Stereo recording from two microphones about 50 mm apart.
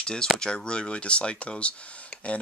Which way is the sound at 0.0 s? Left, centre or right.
Centre.